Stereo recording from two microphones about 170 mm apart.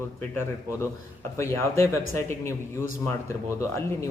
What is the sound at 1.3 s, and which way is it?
Speech, 15° left (ahead or behind).